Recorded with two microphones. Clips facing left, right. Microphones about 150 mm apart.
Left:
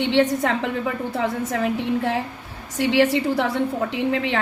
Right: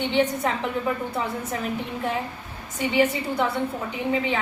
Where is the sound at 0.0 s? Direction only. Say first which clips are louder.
Left 4 dB; 90° left.